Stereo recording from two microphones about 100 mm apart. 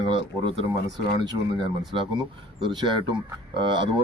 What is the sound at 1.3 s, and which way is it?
Speech, 50° right (ahead or behind).